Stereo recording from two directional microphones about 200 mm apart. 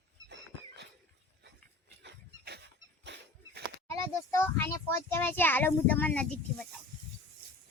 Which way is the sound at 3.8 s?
15° left (ahead or behind).